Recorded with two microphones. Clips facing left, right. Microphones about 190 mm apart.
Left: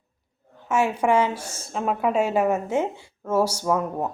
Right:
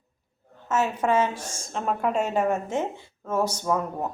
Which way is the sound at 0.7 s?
10° left (ahead or behind).